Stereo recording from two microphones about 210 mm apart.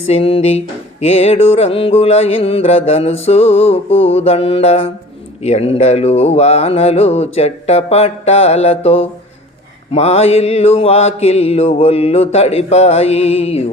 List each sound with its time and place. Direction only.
0.1 s music: 25° left (ahead or behind)